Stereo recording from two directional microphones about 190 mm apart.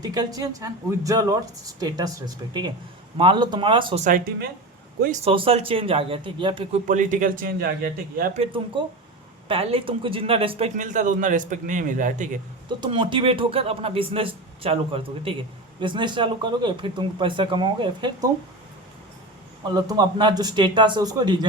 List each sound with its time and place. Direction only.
0.0 s a man's voice: 20° right (ahead or behind)
5.2 s a man's voice: 30° right (ahead or behind)
6.8 s a man's voice: 40° right (ahead or behind)
8.2 s a man's voice: 35° right (ahead or behind)
10.8 s a man's voice: 40° right (ahead or behind)
12.6 s a man's voice: 25° right (ahead or behind)
19.7 s a man's voice: 20° right (ahead or behind)